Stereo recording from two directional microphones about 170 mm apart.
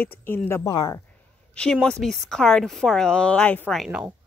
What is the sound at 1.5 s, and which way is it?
Speech, 5° left (ahead or behind).